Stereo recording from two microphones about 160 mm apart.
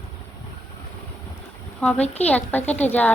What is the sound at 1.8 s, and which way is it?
A woman's voice, 5° left (ahead or behind).